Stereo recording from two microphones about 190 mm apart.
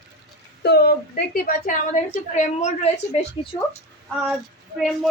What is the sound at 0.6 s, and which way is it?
Speech, 60° left (ahead or behind).